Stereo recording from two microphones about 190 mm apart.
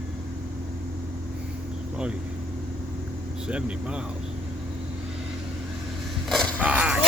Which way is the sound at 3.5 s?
5° right (ahead or behind).